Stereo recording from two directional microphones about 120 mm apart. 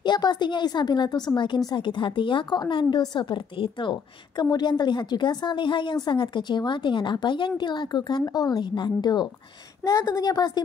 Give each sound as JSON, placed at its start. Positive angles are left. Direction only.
{"t": 0.0, "sound": "a woman's voice", "side_deg": 40}